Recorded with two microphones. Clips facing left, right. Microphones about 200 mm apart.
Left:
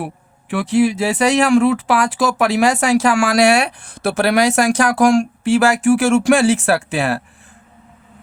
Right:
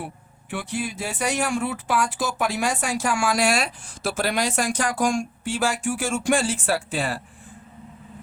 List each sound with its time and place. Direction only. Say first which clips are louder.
0.5 s speech: left 13 dB; 85° left